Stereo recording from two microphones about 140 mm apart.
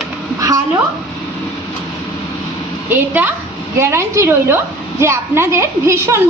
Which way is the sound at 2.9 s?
15° right (ahead or behind).